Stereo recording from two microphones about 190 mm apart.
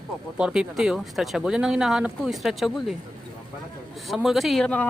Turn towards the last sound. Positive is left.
turn(degrees=5)  # may be behind; listen again after turning